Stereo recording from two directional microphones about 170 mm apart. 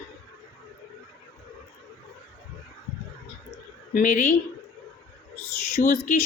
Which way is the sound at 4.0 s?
55° left (ahead or behind).